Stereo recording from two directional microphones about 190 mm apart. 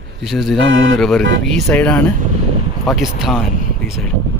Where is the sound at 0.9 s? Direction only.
Centre (ahead or behind).